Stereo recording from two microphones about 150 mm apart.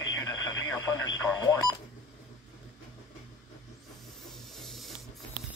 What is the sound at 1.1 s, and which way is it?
Radio, 25° left (ahead or behind).